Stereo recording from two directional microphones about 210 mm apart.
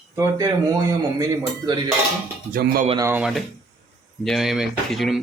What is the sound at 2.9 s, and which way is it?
Speech, 15° right (ahead or behind).